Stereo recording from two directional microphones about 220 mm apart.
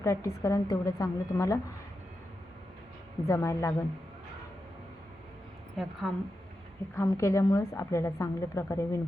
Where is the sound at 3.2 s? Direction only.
15° left (ahead or behind).